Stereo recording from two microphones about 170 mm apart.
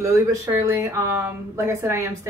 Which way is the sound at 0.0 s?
20° right (ahead or behind).